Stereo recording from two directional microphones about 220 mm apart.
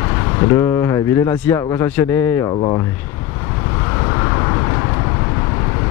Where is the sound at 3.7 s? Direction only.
15° left (ahead or behind).